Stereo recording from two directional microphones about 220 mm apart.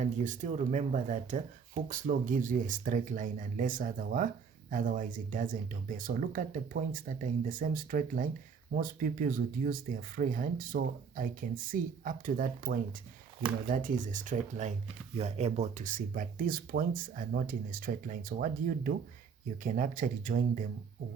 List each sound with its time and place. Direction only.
0.0 s speech: 35° right (ahead or behind)